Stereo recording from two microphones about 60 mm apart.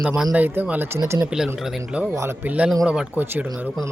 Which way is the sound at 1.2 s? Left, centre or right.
Centre.